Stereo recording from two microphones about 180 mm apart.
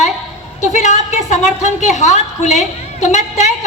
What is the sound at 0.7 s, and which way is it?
A woman's voice, 40° left (ahead or behind).